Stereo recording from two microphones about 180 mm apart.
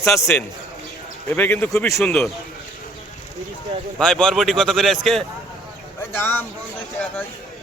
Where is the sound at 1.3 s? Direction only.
10° left (ahead or behind).